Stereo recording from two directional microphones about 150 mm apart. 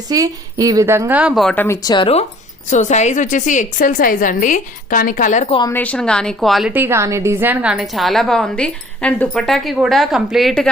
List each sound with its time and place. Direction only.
0.1 s a woman's voice: 25° right (ahead or behind); by 1.5 s centre (ahead or behind)
1.5 s speech: 20° left (ahead or behind)
2.6 s a woman's voice: 50° left (ahead or behind)
5.7 s a woman's voice: 10° left (ahead or behind)
6.7 s a woman's voice: 15° right (ahead or behind); by 10.7 s centre (ahead or behind)